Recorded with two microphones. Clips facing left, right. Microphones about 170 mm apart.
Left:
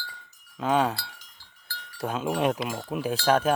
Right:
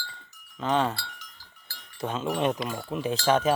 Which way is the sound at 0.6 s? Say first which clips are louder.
Left 2 dB; 5° left (ahead or behind).